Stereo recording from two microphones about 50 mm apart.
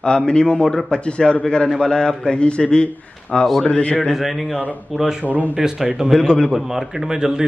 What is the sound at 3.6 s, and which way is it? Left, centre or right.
Speech, left.